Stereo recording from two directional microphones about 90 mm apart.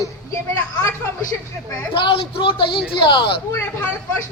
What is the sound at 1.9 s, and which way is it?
Speech, 70° left (ahead or behind).